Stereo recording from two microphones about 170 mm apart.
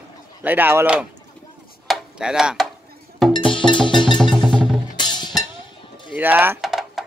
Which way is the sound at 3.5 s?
30° left (ahead or behind).